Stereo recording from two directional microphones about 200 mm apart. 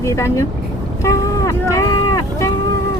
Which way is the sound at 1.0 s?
15° left (ahead or behind).